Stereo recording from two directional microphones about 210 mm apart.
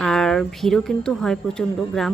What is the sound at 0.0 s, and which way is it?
Speech, centre (ahead or behind).